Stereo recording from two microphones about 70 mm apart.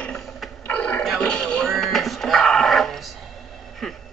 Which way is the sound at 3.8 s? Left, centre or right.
Centre.